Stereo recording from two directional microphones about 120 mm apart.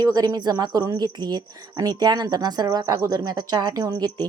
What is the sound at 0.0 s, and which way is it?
Speech, 30° right (ahead or behind).